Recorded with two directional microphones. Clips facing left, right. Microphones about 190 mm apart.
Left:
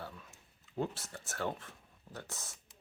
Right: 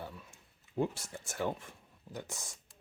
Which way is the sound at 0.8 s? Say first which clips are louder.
Right 3 dB; 15° right (ahead or behind).